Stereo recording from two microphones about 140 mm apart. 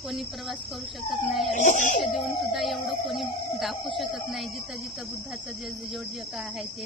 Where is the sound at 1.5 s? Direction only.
60° left (ahead or behind).